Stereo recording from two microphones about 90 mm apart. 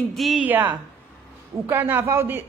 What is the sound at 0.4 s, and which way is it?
A man's voice, 20° right (ahead or behind).